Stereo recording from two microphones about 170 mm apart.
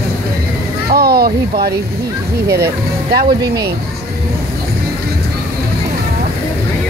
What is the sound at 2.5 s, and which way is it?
Speech, 70° right (ahead or behind).